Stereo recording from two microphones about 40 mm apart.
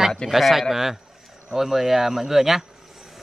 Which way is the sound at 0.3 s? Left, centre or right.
Centre.